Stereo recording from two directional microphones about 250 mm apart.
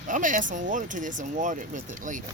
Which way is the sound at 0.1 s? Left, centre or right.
Right.